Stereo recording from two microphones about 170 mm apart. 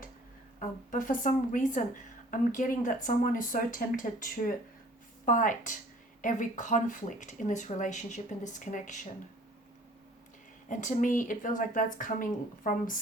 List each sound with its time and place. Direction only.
0.6 s speech: 50° left (ahead or behind)
10.7 s speech: 50° left (ahead or behind)